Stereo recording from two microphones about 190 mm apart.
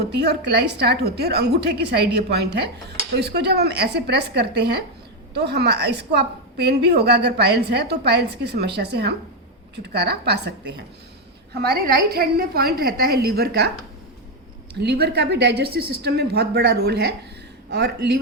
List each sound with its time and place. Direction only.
0.0 s a woman's voice: 60° right (ahead or behind)
14.8 s a woman's voice: 60° right (ahead or behind)